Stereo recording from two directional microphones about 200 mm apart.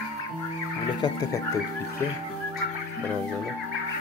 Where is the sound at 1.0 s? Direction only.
20° left (ahead or behind).